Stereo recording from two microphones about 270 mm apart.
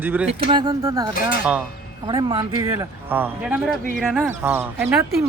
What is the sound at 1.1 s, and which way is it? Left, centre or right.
Speech, left.